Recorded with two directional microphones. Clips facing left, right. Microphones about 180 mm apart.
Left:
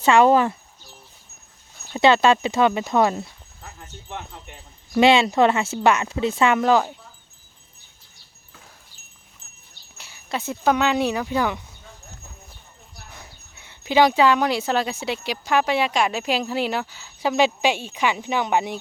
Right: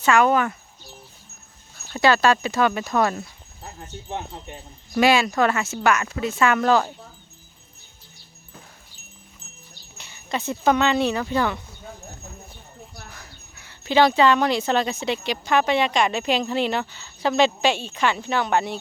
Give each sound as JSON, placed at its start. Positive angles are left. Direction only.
{"t": 0.0, "sound": "speech", "side_deg": 30}
{"t": 1.9, "sound": "speech", "side_deg": 25}
{"t": 3.6, "sound": "speech", "side_deg": -25}
{"t": 4.3, "sound": "wind chime", "side_deg": -25}
{"t": 4.9, "sound": "speech", "side_deg": 25}
{"t": 6.6, "sound": "speech", "side_deg": 15}
{"t": 10.0, "sound": "speech", "side_deg": 5}
{"t": 13.1, "sound": "dog", "side_deg": 25}
{"t": 13.8, "sound": "speech", "side_deg": 10}